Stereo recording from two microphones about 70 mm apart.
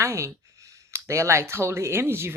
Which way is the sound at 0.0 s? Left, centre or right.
Right.